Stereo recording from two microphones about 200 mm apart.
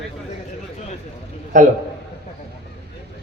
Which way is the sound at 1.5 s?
40° right (ahead or behind).